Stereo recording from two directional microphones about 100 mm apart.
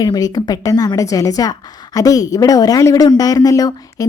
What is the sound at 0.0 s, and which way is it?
Speech, 40° left (ahead or behind).